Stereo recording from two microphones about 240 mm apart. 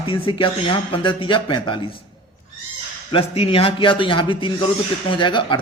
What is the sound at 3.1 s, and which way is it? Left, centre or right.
Speech, left.